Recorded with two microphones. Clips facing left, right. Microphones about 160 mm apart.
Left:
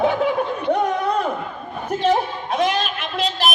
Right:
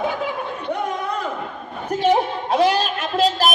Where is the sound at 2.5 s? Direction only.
35° right (ahead or behind).